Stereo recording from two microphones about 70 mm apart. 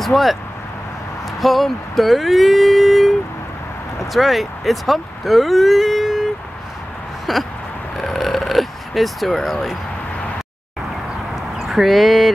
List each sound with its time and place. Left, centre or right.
0.0 s speech: centre
1.4 s speech: centre
7.3 s speech: centre
8.0 s a sound: centre
11.6 s speech: centre